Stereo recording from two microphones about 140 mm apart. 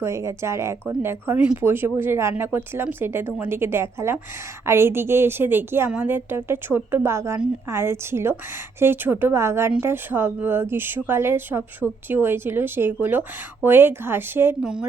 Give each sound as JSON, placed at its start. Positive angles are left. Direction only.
{"t": 0.0, "sound": "speech", "side_deg": -20}
{"t": 14.6, "sound": "speech", "side_deg": -5}